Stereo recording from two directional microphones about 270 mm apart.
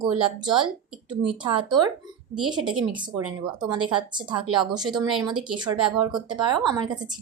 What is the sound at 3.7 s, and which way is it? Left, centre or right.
Speech, right.